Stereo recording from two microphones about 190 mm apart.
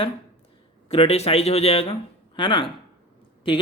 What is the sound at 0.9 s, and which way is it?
Speech, 30° left (ahead or behind).